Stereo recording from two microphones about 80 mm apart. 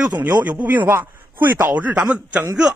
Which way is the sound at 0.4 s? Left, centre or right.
Centre.